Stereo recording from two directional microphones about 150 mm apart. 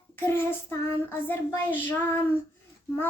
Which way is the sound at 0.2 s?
15° left (ahead or behind).